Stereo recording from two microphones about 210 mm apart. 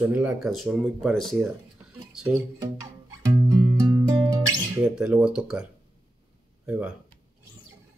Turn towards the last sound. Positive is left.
turn(degrees=-5)  # may be behind; listen again after turning